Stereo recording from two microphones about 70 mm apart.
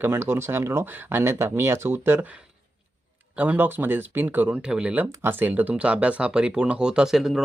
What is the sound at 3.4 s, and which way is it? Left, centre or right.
Speech, right.